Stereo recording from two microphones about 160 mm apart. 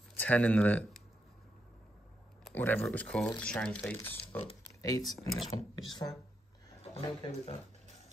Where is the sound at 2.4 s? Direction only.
10° left (ahead or behind).